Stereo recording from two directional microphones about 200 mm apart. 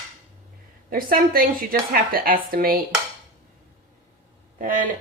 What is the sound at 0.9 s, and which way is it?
A woman's voice, 45° right (ahead or behind).